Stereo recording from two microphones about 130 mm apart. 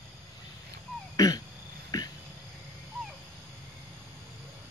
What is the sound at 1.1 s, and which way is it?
Throat clearing, 30° left (ahead or behind).